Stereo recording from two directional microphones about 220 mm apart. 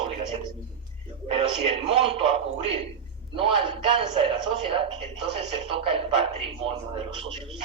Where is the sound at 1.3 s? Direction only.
25° right (ahead or behind).